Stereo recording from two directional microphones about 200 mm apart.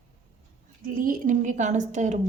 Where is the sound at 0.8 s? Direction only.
45° right (ahead or behind).